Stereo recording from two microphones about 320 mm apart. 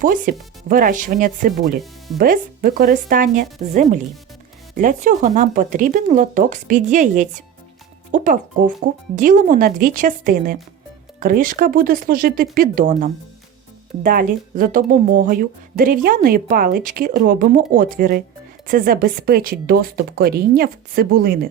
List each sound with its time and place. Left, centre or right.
0.0 s speech: right